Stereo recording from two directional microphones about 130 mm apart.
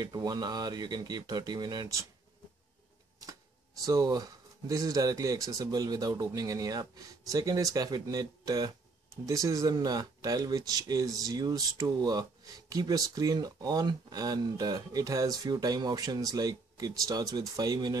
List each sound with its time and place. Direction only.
0.0 s speech: 30° right (ahead or behind)
3.8 s speech: 25° right (ahead or behind)